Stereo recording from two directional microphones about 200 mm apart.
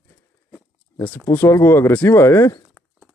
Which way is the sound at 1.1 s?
10° left (ahead or behind).